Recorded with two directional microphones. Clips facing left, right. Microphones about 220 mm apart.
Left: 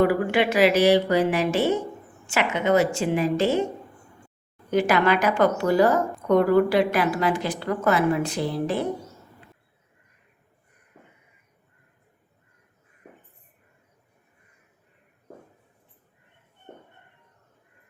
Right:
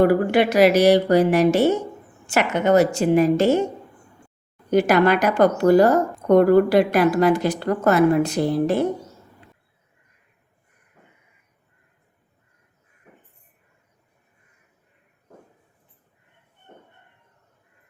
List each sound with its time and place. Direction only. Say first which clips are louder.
0.0 s a woman's voice: right 4 dB; 40° right (ahead or behind)
4.7 s a woman's voice: right 4 dB; 40° right (ahead or behind)